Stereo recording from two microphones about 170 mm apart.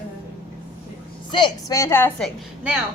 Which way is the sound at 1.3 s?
25° left (ahead or behind).